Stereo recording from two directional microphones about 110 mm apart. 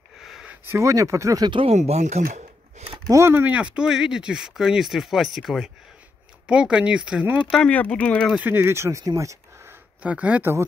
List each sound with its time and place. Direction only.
0.2 s a sound: centre (ahead or behind)
0.5 s speech: 25° right (ahead or behind)
1.7 s speech: 80° right
3.1 s speech: 25° right (ahead or behind)
7.5 s speech: 10° left (ahead or behind)
8.4 s speech: 15° right (ahead or behind)
10.0 s speech: 10° right (ahead or behind)